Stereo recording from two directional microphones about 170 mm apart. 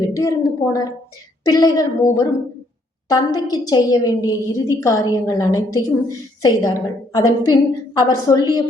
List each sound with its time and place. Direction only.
0.2 s a woman's voice: 20° left (ahead or behind)